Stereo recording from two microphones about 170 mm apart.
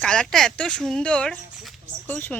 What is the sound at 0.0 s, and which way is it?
Speech, 5° left (ahead or behind).